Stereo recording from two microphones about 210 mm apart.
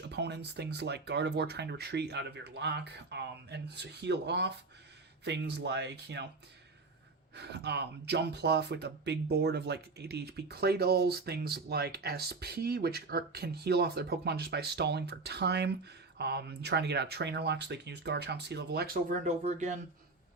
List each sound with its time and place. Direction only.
0.1 s speech: 55° right (ahead or behind)
7.3 s speech: 55° right (ahead or behind)
19.2 s speech: 35° right (ahead or behind)